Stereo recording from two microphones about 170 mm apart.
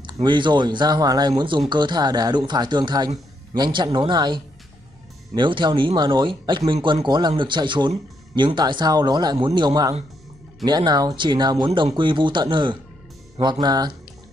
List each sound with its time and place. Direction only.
0.0 s speech: 25° right (ahead or behind)